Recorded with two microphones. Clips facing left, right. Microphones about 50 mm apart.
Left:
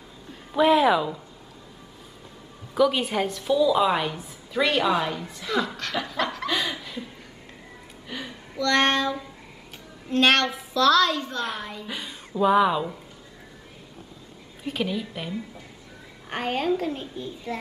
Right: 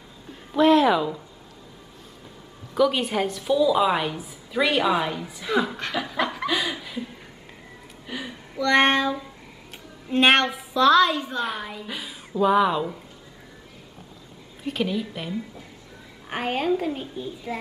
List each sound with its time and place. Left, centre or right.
0.3 s a sound: centre
2.7 s a woman's voice: centre
5.9 s laughter: centre
8.1 s a sound: centre
8.5 s a child's voice: centre
14.6 s a woman's voice: centre